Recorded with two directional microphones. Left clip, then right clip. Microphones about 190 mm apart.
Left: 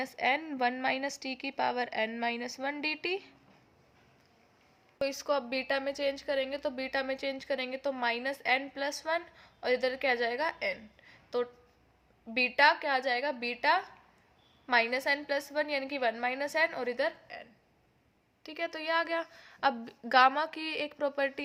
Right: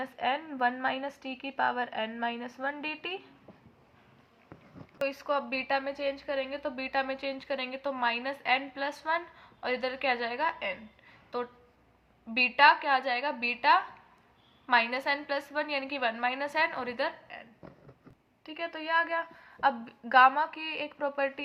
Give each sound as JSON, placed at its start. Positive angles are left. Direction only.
{"t": 0.0, "sound": "a woman's voice", "side_deg": 30}
{"t": 5.0, "sound": "a woman's voice", "side_deg": 45}
{"t": 18.4, "sound": "a woman's voice", "side_deg": 50}